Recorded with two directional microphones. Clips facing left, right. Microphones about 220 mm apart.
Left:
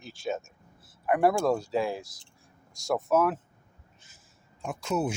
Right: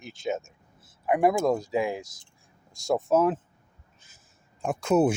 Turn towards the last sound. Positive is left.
turn(degrees=-55)  # may be behind; listen again after turning